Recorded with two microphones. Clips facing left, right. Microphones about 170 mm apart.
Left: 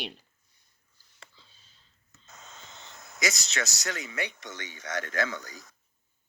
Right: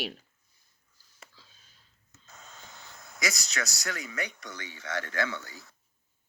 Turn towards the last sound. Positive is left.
turn(degrees=20)  # may be behind; listen again after turning